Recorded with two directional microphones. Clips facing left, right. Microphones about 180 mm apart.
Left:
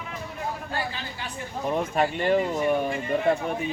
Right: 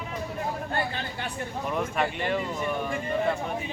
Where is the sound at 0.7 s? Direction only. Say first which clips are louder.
Right 2 dB; 55° right (ahead or behind).